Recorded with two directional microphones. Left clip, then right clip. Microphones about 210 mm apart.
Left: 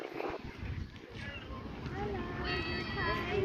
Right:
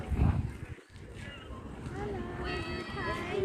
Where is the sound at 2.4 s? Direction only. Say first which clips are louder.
Left 2 dB; 55° right (ahead or behind).